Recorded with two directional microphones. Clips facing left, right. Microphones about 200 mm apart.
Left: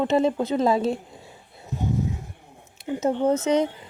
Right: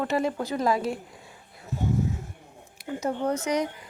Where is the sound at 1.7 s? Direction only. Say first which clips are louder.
Left 1 dB; 20° left (ahead or behind).